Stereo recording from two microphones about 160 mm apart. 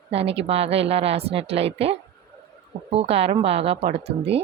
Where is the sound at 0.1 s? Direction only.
40° right (ahead or behind).